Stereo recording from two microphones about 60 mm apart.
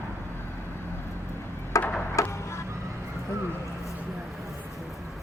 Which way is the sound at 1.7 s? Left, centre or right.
Left.